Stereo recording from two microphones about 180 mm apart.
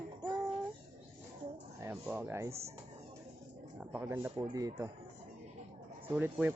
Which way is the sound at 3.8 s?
10° right (ahead or behind).